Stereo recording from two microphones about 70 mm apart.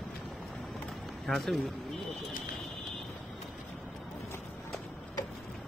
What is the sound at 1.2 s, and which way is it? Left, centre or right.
Speech, centre.